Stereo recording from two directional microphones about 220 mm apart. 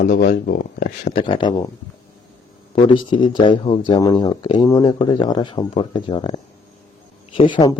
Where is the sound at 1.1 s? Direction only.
20° left (ahead or behind).